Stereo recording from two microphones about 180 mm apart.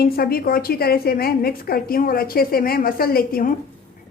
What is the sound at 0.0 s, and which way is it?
A woman's voice, 55° left (ahead or behind).